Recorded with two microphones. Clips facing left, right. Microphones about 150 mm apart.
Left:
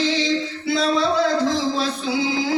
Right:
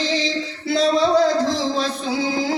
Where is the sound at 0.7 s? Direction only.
40° right (ahead or behind).